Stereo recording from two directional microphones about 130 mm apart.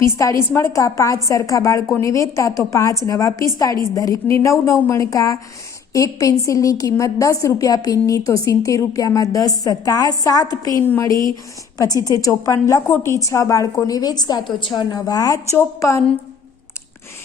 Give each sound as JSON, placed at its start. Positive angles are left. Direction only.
{"t": 0.0, "sound": "a woman's voice", "side_deg": 20}